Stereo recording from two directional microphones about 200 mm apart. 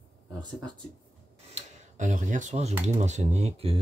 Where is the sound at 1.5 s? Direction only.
40° right (ahead or behind).